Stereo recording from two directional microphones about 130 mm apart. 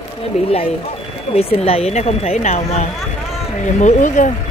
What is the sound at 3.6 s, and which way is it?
Speech, 70° left (ahead or behind).